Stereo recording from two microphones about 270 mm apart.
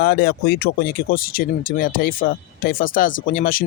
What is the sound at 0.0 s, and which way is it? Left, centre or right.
Speech, left.